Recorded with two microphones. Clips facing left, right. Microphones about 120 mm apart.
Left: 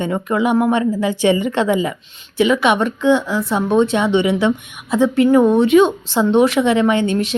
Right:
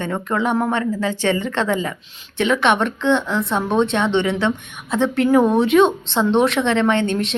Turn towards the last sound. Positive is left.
turn(degrees=5)  # may be behind; listen again after turning